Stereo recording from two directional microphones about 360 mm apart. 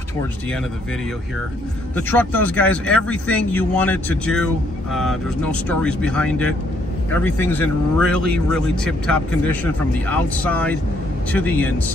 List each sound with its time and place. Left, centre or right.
2.0 s speech: centre